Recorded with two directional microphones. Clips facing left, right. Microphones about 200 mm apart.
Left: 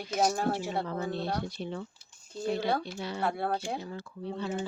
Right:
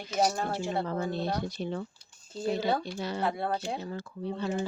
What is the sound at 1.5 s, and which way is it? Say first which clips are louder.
Speech: right 3 dB; 45° right (ahead or behind).